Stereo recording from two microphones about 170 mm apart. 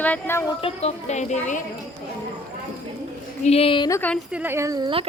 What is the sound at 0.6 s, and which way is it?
Speech, 40° left (ahead or behind).